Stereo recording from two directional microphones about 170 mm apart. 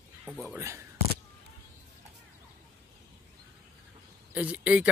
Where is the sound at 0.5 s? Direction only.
15° right (ahead or behind).